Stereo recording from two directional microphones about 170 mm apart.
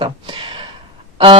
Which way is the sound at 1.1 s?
30° right (ahead or behind).